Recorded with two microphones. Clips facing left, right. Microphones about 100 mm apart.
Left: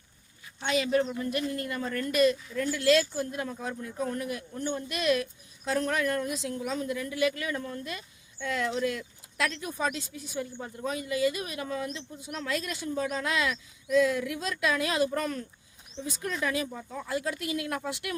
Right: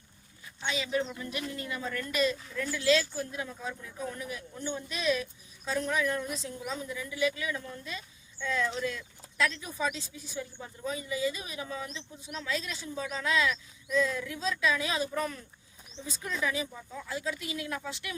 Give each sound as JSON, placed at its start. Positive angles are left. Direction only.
{"t": 0.6, "sound": "a woman's voice", "side_deg": 55}